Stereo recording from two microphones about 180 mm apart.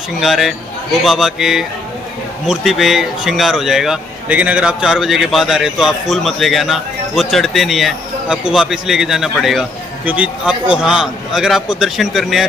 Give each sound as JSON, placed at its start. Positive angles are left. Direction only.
{"t": 0.2, "sound": "speech", "side_deg": 0}